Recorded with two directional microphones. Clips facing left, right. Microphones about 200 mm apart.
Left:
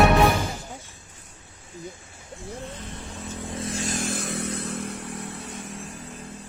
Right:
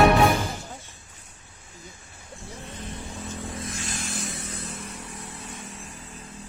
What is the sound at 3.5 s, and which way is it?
Vehicle, 30° left (ahead or behind).